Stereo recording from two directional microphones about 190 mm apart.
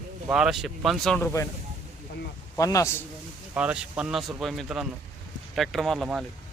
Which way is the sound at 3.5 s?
5° right (ahead or behind).